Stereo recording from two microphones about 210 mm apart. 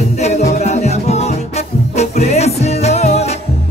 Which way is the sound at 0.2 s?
30° left (ahead or behind).